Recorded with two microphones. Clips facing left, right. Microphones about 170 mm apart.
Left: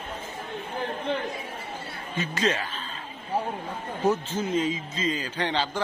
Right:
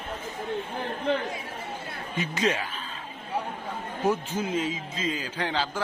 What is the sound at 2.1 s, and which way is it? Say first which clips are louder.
Speech: even; 15° right (ahead or behind).